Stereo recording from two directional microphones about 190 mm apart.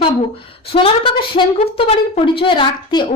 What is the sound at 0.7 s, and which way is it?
A woman's voice, 30° left (ahead or behind).